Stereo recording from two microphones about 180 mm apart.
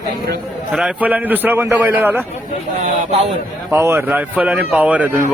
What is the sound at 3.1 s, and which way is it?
Speech, 35° right (ahead or behind).